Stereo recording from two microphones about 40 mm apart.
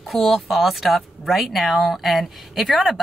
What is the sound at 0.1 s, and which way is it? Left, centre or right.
Speech, centre.